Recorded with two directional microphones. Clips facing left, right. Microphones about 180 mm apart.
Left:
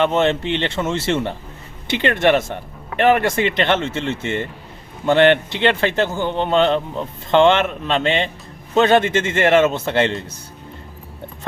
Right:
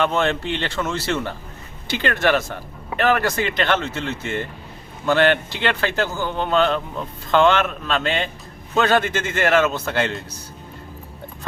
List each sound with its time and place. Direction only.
0.0 s a man's voice: 25° left (ahead or behind)